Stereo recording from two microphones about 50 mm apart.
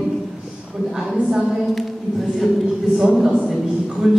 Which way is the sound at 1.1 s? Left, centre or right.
Centre.